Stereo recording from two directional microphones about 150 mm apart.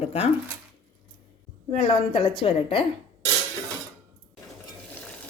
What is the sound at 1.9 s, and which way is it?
Speech, 35° left (ahead or behind).